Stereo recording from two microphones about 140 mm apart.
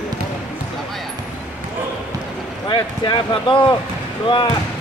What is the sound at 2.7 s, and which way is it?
Speech, 35° left (ahead or behind).